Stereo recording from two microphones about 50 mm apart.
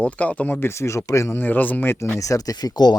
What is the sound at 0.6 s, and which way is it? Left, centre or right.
Speech, left.